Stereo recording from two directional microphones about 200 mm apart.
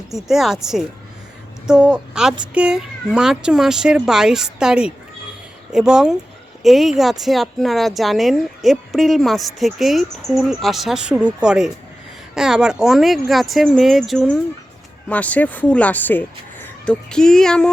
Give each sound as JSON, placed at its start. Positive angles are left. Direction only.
{"t": 0.1, "sound": "a woman's voice", "side_deg": 0}